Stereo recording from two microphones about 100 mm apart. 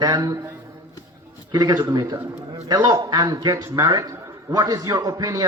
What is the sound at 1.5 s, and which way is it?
A man's voice, 45° right (ahead or behind).